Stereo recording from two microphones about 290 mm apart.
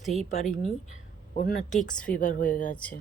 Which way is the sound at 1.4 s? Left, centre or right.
Left.